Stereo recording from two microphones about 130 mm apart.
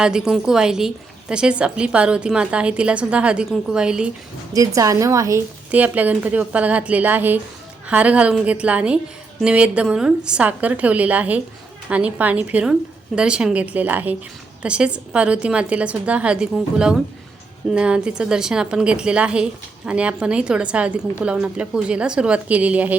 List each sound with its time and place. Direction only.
0.0 s a woman's voice: 5° right (ahead or behind)
4.5 s a woman's voice: 25° right (ahead or behind)
5.7 s a woman's voice: 10° right (ahead or behind)